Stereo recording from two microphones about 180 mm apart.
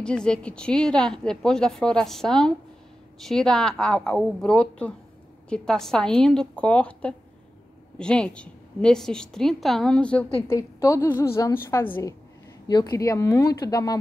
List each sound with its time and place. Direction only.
0.0 s a woman's voice: 5° left (ahead or behind)